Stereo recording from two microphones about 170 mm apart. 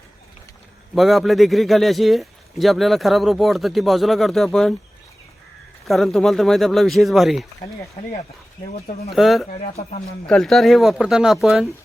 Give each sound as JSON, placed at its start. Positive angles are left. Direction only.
{"t": 0.9, "sound": "a man's voice", "side_deg": 0}
{"t": 5.8, "sound": "a man's voice", "side_deg": 0}
{"t": 8.7, "sound": "speech", "side_deg": 35}
{"t": 9.1, "sound": "a man's voice", "side_deg": 0}
{"t": 9.5, "sound": "speech", "side_deg": 40}
{"t": 10.2, "sound": "a man's voice", "side_deg": 5}